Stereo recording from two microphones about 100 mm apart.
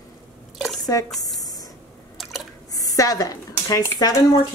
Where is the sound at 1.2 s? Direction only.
35° left (ahead or behind).